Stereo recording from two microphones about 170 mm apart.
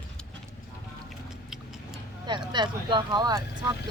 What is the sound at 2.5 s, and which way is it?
Speech, 25° right (ahead or behind).